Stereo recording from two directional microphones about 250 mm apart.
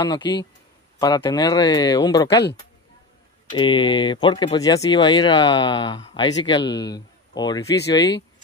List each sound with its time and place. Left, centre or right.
0.0 s speech: centre
3.5 s speech: centre